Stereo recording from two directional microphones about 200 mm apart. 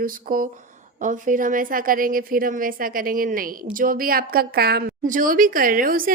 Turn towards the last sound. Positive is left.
turn(degrees=-45)  # may be behind; listen again after turning